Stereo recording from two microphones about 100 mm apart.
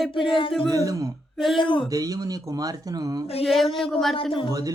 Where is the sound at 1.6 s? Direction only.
60° left (ahead or behind).